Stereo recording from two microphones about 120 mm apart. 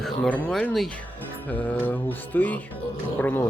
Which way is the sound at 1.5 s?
15° left (ahead or behind).